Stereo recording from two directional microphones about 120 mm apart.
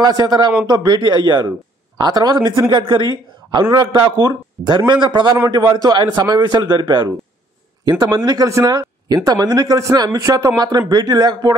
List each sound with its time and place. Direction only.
0.0 s speech: 35° right (ahead or behind)